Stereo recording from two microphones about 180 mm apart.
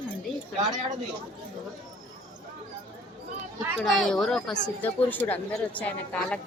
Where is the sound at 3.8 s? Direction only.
Centre (ahead or behind).